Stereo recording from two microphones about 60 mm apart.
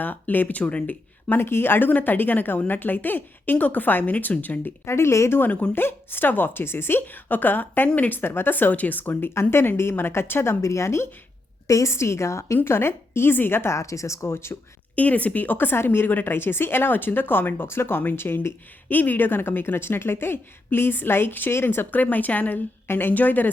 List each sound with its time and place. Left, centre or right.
0.0 s a woman's voice: left
0.6 s a woman's voice: left
1.3 s a woman's voice: left
4.9 s a woman's voice: left
5.4 s a woman's voice: left
13.7 s speech: left
14.9 s a woman's voice: left
22.0 s a woman's voice: left